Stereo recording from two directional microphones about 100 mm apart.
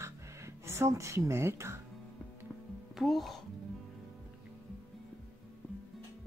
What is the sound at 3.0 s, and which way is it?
Speech, centre (ahead or behind).